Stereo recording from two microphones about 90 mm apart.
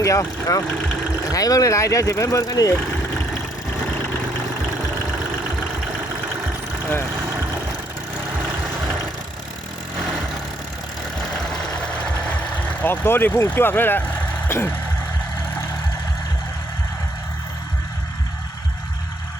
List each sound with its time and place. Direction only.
0.0 s speech: 35° left (ahead or behind)
12.8 s speech: 20° left (ahead or behind)
14.4 s vehicle: 25° left (ahead or behind)